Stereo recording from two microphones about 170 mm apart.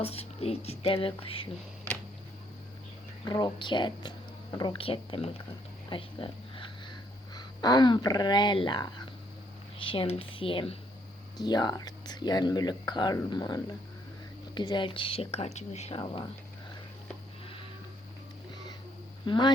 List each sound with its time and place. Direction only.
0.0 s speech: 35° left (ahead or behind)
1.9 s a sound: 10° left (ahead or behind)
3.2 s speech: 25° left (ahead or behind)
5.9 s a sound: 30° left (ahead or behind)
7.3 s speech: 25° left (ahead or behind); by 16.0 s 40° left (ahead or behind)
19.2 s speech: 30° left (ahead or behind)